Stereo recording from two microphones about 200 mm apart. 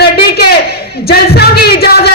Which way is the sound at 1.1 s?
55° left (ahead or behind).